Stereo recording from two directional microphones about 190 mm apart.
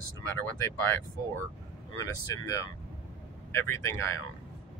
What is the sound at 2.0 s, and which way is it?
Speech, 15° left (ahead or behind).